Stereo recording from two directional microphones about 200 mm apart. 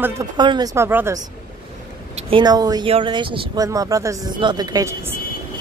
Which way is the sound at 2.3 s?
20° right (ahead or behind).